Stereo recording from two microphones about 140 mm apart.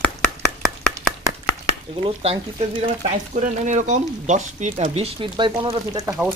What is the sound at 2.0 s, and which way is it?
Speech, 45° right (ahead or behind).